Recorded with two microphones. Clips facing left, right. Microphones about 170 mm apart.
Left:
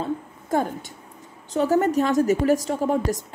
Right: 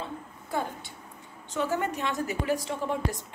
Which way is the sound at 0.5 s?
45° left (ahead or behind).